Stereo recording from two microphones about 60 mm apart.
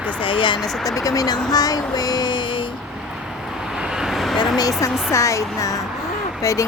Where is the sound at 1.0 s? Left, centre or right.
Left.